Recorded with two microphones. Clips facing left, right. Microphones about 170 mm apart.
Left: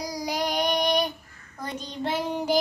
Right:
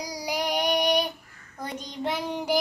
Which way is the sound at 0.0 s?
10° right (ahead or behind).